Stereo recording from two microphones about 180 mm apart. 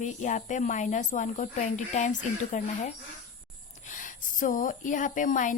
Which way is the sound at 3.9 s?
45° left (ahead or behind).